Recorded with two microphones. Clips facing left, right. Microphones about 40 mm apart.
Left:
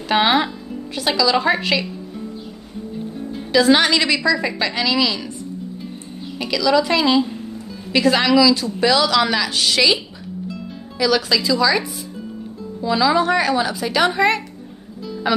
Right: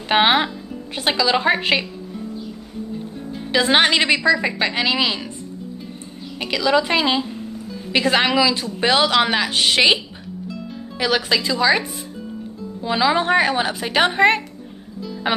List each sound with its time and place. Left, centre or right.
0.1 s a woman's voice: right
3.5 s a woman's voice: right
6.3 s a woman's voice: right
11.0 s speech: right
12.8 s speech: right